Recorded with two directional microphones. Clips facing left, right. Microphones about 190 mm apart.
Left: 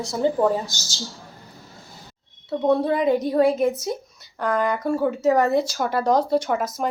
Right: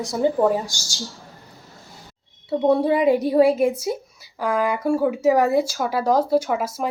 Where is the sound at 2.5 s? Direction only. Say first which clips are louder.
Right 2 dB; 10° right (ahead or behind).